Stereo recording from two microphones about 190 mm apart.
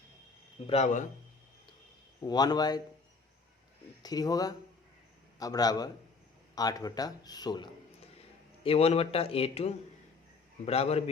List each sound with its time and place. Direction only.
0.7 s speech: 35° left (ahead or behind)
2.2 s speech: 20° left (ahead or behind)
4.0 s speech: 20° left (ahead or behind)